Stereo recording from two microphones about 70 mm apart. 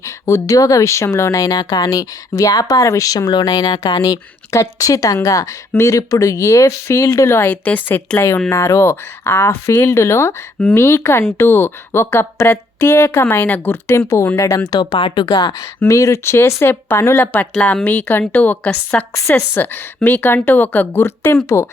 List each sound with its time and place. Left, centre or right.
0.0 s speech: left
4.5 s speech: left
7.5 s speech: left
8.4 s speech: left
14.3 s speech: left
14.7 s speech: left
15.9 s speech: left
17.2 s speech: left